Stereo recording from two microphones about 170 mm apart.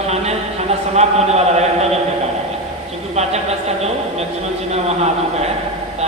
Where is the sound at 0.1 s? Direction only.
40° right (ahead or behind).